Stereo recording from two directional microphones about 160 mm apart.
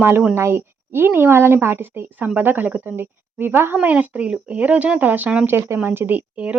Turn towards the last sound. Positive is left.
turn(degrees=-10)  # may be behind; listen again after turning